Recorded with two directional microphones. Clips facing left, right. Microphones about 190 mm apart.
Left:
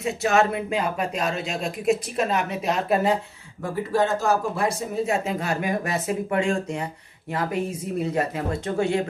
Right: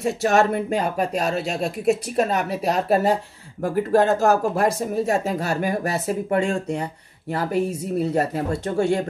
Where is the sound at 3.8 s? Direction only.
50° right (ahead or behind).